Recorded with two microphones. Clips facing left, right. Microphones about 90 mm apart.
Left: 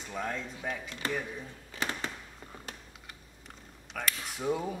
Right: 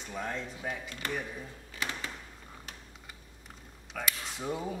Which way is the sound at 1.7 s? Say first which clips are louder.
Left 3 dB; 35° left (ahead or behind).